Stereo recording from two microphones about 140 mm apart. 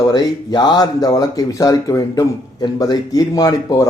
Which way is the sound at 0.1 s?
30° left (ahead or behind).